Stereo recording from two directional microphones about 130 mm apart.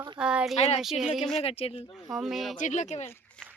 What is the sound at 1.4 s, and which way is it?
Speech, 50° left (ahead or behind).